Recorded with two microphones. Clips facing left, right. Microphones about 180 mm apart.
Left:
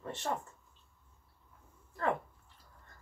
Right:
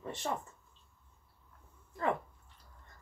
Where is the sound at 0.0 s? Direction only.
15° right (ahead or behind).